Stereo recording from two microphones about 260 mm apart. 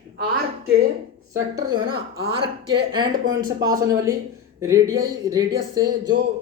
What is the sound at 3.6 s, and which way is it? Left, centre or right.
Speech, centre.